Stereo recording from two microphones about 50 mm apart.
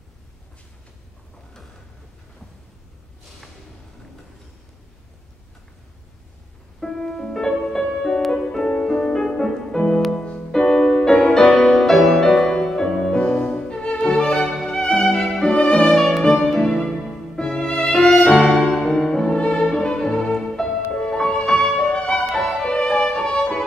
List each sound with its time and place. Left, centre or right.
6.8 s music: centre
17.8 s violin: centre
18.4 s music: centre